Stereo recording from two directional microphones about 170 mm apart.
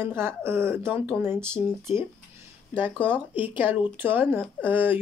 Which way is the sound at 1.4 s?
5° left (ahead or behind).